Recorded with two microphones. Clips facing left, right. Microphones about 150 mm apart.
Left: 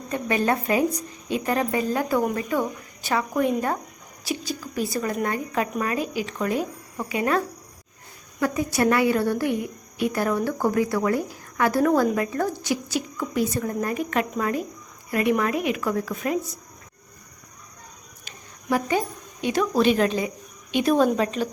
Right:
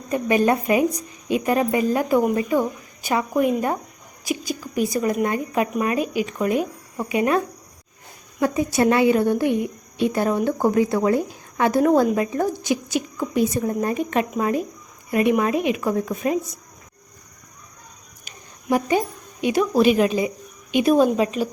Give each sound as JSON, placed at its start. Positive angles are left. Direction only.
{"t": 0.1, "sound": "a woman's voice", "side_deg": -15}
{"t": 18.7, "sound": "a woman's voice", "side_deg": -15}